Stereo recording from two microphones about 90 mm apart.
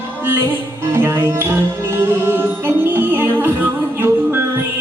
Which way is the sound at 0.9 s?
25° right (ahead or behind).